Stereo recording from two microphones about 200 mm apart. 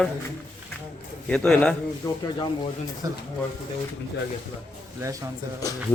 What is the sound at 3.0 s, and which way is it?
Speech, 15° right (ahead or behind).